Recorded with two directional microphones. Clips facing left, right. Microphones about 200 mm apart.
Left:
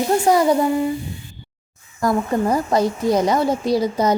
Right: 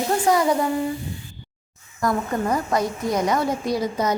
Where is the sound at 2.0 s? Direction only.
30° left (ahead or behind).